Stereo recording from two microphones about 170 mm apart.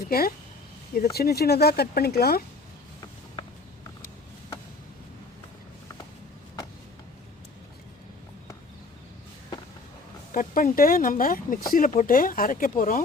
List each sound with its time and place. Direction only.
0.1 s speech: 60° left (ahead or behind)
10.3 s speech: 55° left (ahead or behind)